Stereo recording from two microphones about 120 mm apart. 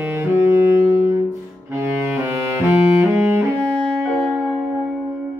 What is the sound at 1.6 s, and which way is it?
Music, 20° right (ahead or behind).